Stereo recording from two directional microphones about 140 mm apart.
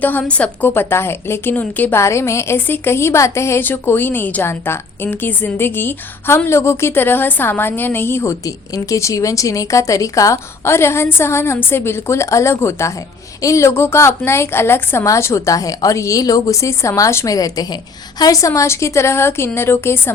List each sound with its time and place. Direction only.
0.0 s a woman's voice: 10° left (ahead or behind)